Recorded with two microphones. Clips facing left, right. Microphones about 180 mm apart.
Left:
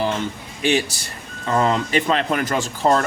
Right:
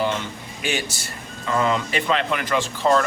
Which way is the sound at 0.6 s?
35° left (ahead or behind).